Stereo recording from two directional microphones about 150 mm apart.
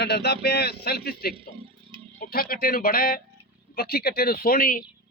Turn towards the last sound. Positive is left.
turn(degrees=70)  # may be behind; listen again after turning